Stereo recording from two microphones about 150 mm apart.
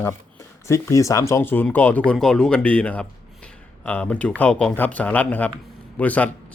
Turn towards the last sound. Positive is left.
turn(degrees=10)  # may be behind; listen again after turning